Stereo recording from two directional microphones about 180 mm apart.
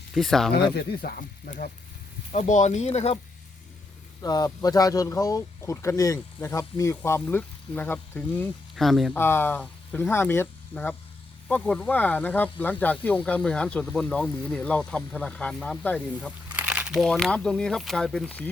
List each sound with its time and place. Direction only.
0.1 s speech: centre (ahead or behind)
0.5 s speech: 65° left (ahead or behind)
2.3 s speech: 40° left (ahead or behind)
4.2 s speech: 20° left (ahead or behind)
8.7 s speech: centre (ahead or behind)
9.1 s speech: 10° left (ahead or behind)
16.5 s speech: 5° right (ahead or behind)